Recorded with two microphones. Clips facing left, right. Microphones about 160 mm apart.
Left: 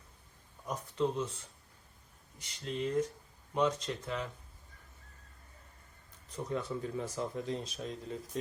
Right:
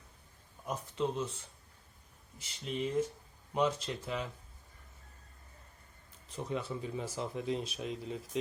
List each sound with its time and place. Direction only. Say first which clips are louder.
0.6 s speech: left 1 dB; 5° right (ahead or behind)
2.4 s speech: even; 5° right (ahead or behind)
6.6 s speech: left 1 dB; 5° right (ahead or behind)